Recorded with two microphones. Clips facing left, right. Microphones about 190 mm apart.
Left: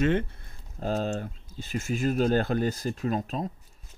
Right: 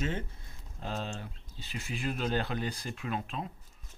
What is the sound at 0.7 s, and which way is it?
Speech, 45° left (ahead or behind).